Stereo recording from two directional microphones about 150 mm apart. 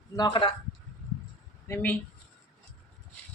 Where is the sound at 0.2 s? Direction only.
35° left (ahead or behind).